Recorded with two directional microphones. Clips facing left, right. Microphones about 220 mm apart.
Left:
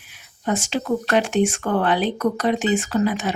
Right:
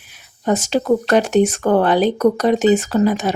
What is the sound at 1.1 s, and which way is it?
Speech, 40° right (ahead or behind).